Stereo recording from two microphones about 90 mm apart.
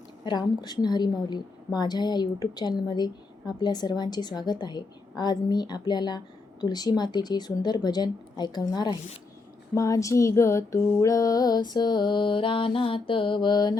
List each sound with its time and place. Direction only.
0.3 s a woman's voice: 50° left (ahead or behind)
9.7 s a woman's voice: 35° left (ahead or behind)